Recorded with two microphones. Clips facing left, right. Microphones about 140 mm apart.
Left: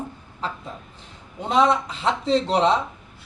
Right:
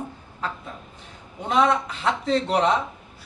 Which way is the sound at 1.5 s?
30° left (ahead or behind).